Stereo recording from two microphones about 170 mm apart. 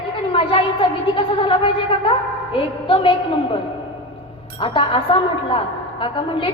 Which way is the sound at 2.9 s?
30° left (ahead or behind).